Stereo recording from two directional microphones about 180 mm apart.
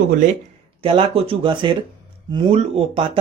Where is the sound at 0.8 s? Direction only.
30° right (ahead or behind).